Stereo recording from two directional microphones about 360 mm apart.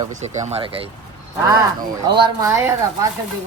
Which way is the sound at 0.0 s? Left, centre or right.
Centre.